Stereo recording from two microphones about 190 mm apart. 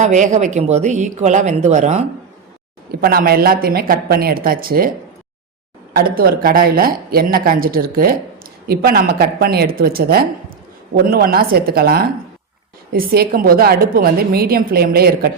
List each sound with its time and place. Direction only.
0.0 s speech: 40° right (ahead or behind)
3.0 s a woman's voice: 55° right (ahead or behind)
5.9 s a woman's voice: 50° right (ahead or behind)